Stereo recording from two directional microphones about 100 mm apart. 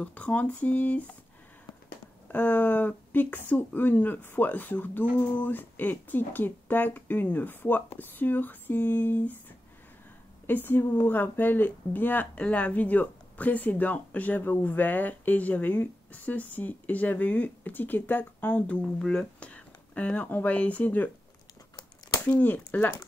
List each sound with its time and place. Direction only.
0.0 s speech: 15° left (ahead or behind)
2.3 s speech: 15° left (ahead or behind)
10.4 s a woman's voice: 20° left (ahead or behind)
22.2 s speech: 20° left (ahead or behind)